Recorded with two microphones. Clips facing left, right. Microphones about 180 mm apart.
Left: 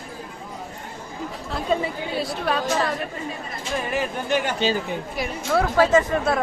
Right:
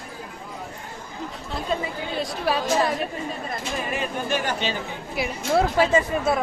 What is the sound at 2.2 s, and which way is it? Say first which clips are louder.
Speech: even; 5° right (ahead or behind).